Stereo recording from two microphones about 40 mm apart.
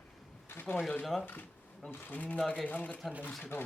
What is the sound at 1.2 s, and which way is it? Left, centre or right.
Speech, left.